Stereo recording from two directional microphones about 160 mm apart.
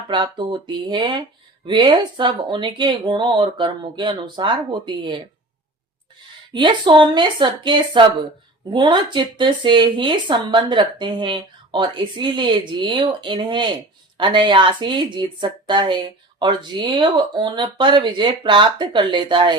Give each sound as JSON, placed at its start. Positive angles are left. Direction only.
{"t": 0.1, "sound": "speech", "side_deg": -30}
{"t": 6.5, "sound": "speech", "side_deg": -30}